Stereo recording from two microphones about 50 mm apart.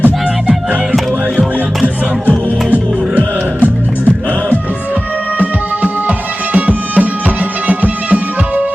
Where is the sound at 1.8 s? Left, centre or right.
Right.